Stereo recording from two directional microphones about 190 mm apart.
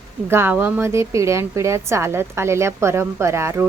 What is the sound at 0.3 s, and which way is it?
A woman's voice, 10° right (ahead or behind).